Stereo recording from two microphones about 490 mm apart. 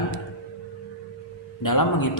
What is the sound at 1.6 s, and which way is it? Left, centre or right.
Speech, left.